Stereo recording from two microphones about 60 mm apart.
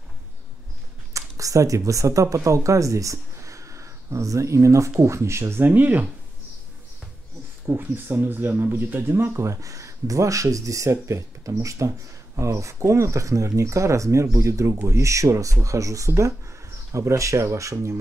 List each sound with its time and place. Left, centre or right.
1.1 s speech: right
5.6 s speech: right
7.6 s speech: right